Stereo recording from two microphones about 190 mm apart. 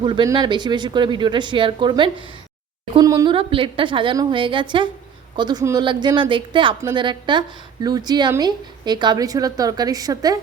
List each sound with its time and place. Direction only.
0.0 s a woman's voice: 25° right (ahead or behind)